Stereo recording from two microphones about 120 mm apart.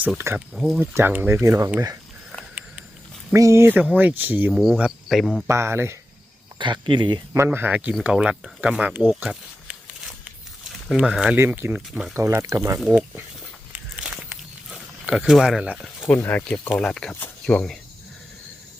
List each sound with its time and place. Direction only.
0.3 s speech: 5° right (ahead or behind)
0.8 s speech: 15° right (ahead or behind)
3.3 s speech: 25° right (ahead or behind)
4.5 s speech: centre (ahead or behind)
5.5 s speech: 20° right (ahead or behind)
6.6 s speech: 40° right (ahead or behind)
7.3 s speech: 20° right (ahead or behind)
12.9 s speech: 10° right (ahead or behind)
14.7 s speech: 5° right (ahead or behind)
16.0 s speech: 15° left (ahead or behind)